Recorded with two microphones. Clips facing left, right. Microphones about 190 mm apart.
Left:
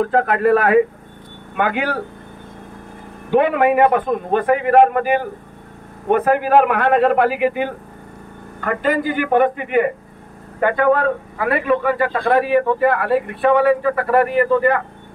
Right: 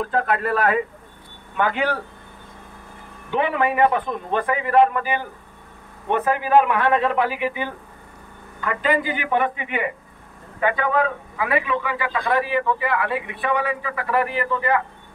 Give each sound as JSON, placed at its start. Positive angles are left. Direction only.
{"t": 0.0, "sound": "a man's voice", "side_deg": 50}
{"t": 3.3, "sound": "a man's voice", "side_deg": 50}